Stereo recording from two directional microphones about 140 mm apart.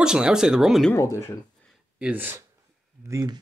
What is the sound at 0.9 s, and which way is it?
Speech, 20° left (ahead or behind).